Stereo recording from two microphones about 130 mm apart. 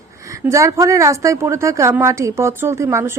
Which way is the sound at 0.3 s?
25° right (ahead or behind).